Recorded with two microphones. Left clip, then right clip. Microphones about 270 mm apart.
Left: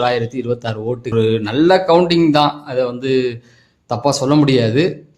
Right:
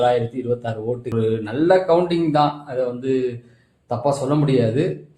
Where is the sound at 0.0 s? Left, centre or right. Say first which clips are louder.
Left 1 dB; left.